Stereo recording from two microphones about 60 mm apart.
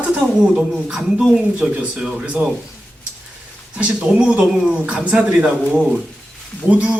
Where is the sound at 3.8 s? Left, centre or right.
Centre.